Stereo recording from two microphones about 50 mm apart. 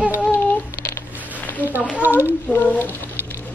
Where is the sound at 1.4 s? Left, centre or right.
Left.